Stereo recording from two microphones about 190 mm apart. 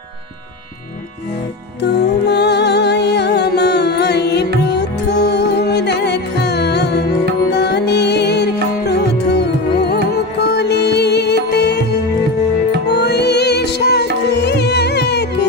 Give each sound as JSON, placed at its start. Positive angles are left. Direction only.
{"t": 1.8, "sound": "music", "side_deg": 65}
{"t": 12.9, "sound": "music", "side_deg": 60}